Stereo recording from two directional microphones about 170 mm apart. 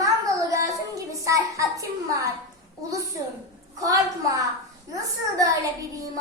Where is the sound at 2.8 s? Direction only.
20° right (ahead or behind).